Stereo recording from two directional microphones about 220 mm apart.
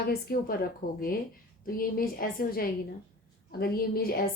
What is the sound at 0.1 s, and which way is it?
A woman's voice, 45° left (ahead or behind).